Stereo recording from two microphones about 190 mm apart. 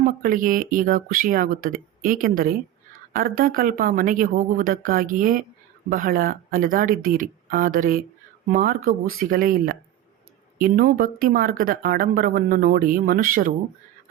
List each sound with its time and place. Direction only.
0.0 s speech: 45° right (ahead or behind)